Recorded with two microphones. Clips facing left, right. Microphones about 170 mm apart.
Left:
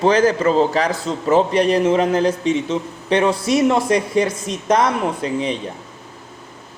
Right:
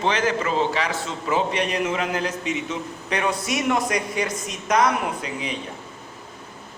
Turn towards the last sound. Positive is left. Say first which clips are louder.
# left 8 dB
turn(degrees=30)  # may be behind; listen again after turning